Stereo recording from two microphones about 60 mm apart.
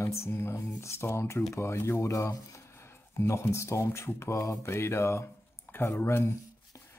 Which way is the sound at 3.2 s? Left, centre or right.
Left.